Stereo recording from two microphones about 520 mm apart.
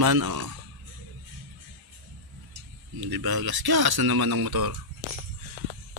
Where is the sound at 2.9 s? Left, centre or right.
Right.